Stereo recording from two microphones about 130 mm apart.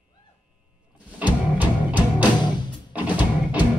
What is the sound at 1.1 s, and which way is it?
Music, 10° right (ahead or behind).